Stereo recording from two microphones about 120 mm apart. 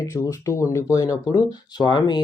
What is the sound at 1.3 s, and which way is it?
Speech, 35° left (ahead or behind).